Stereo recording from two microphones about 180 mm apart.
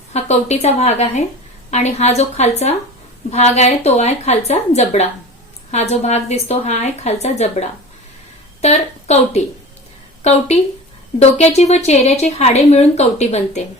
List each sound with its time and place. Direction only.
0.1 s speech: 40° left (ahead or behind)
8.6 s speech: 35° left (ahead or behind)
11.2 s speech: 35° left (ahead or behind)